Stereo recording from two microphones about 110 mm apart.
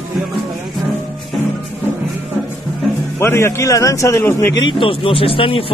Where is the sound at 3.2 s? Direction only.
25° left (ahead or behind).